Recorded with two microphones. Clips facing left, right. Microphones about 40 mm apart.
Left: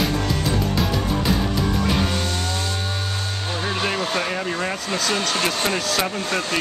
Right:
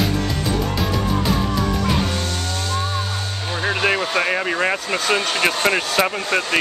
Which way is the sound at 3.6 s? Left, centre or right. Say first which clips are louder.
Right 6 dB; right.